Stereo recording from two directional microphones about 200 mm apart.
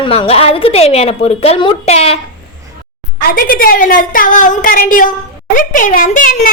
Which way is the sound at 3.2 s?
45° left (ahead or behind).